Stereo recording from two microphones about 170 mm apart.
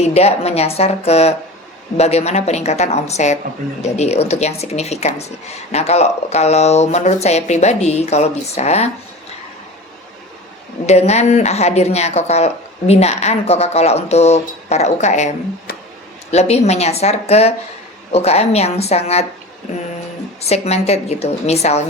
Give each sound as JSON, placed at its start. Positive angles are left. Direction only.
{"t": 0.0, "sound": "speech", "side_deg": 40}
{"t": 10.8, "sound": "speech", "side_deg": 40}
{"t": 16.3, "sound": "speech", "side_deg": 40}
{"t": 20.4, "sound": "speech", "side_deg": 40}